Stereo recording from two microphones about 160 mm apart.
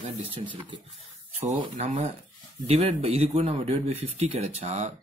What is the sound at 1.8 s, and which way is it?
A man's voice, 50° right (ahead or behind).